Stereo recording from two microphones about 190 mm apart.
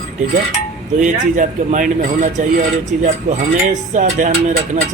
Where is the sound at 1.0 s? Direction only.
40° right (ahead or behind).